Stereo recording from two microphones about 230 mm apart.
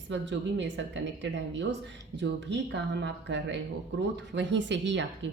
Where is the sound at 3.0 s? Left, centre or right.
Right.